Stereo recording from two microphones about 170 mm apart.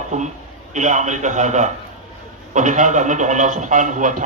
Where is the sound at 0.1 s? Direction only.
45° right (ahead or behind).